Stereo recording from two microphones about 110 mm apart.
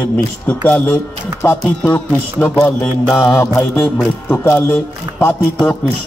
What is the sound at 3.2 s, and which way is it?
Speech, 25° left (ahead or behind).